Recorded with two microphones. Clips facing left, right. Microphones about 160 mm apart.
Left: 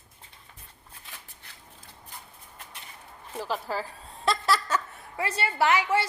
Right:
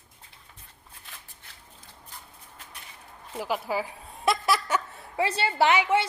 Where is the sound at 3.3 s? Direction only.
10° right (ahead or behind).